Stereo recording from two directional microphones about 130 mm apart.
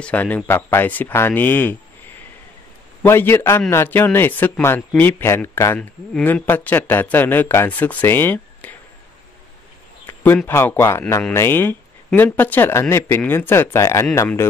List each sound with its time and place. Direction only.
0.0 s speech: 10° left (ahead or behind)
3.0 s speech: 15° left (ahead or behind)
10.0 s speech: 15° left (ahead or behind)